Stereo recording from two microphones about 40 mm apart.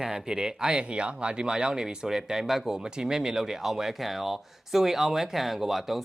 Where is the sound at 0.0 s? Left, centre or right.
Centre.